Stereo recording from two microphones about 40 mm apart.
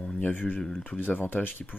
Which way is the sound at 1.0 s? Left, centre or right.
Left.